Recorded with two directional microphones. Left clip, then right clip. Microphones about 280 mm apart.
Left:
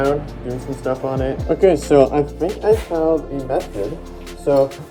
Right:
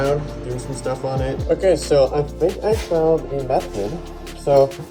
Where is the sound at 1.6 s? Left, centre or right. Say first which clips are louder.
Left 3 dB; centre.